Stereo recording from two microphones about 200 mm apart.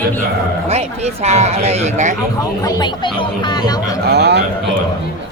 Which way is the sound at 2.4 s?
20° left (ahead or behind).